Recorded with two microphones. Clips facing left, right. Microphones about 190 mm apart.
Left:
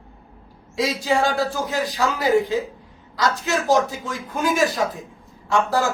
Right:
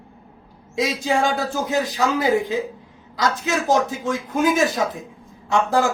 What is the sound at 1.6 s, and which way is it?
A man's voice, 20° right (ahead or behind).